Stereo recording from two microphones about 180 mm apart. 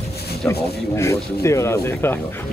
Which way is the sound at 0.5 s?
15° left (ahead or behind).